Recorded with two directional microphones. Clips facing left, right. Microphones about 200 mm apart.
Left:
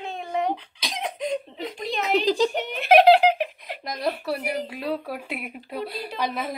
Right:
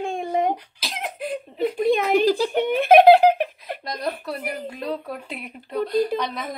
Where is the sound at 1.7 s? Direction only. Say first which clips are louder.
Right 11 dB; 55° right (ahead or behind).